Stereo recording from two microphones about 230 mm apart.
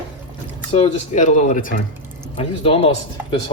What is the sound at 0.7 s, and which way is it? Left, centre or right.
Speech, left.